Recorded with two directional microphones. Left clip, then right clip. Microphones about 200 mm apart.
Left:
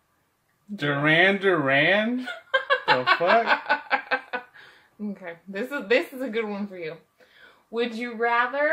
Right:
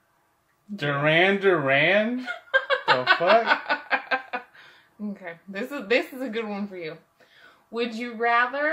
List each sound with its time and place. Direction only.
0.7 s speech: 15° right (ahead or behind)
2.1 s chuckle: 20° left (ahead or behind)
3.4 s music: 20° left (ahead or behind)
5.2 s speech: 15° left (ahead or behind)